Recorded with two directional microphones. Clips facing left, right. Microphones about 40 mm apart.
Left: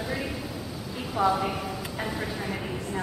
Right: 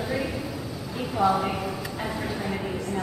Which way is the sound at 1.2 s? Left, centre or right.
Left.